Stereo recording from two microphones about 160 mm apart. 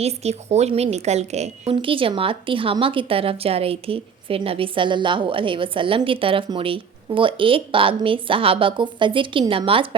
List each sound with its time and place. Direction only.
0.0 s a woman's voice: 40° right (ahead or behind)